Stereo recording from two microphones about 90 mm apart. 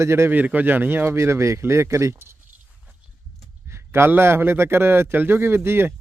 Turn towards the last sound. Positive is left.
turn(degrees=-25)  # may be behind; listen again after turning